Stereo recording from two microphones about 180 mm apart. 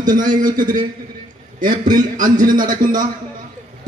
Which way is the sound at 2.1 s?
45° right (ahead or behind).